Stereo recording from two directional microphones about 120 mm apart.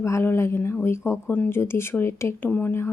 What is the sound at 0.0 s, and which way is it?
A woman's voice, 25° left (ahead or behind).